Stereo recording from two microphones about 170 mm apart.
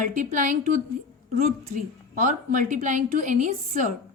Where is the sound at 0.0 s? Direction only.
50° right (ahead or behind).